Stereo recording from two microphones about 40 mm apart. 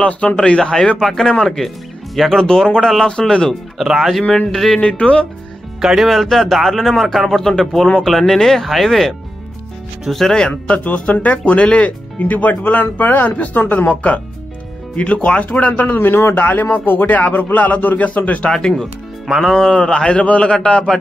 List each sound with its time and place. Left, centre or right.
0.4 s speech: centre
0.9 s speech: centre
3.8 s speech: centre
4.2 s a man's voice: left
4.6 s speech: centre
4.8 s a man's voice: left
5.8 s speech: centre
10.7 s speech: left
13.7 s a man's voice: left
15.4 s speech: left
16.0 s a man's voice: left
16.3 s speech: left
18.5 s speech: centre
20.2 s a man's voice: left